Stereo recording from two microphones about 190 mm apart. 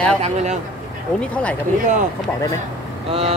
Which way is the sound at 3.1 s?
30° right (ahead or behind).